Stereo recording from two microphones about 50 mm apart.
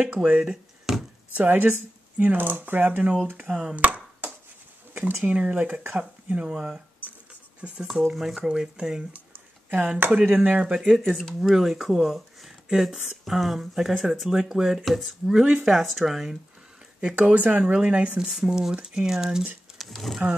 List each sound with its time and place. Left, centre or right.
0.0 s speech: right
0.4 s a sound: centre
1.3 s speech: right
3.7 s a sound: right
5.2 s speech: right
6.5 s speech: centre
8.1 s speech: centre
9.7 s speech: right; by 11.0 s centre
11.1 s speech: centre
15.4 s speech: centre
15.7 s speech: centre
17.2 s speech: right; by 20.2 s centre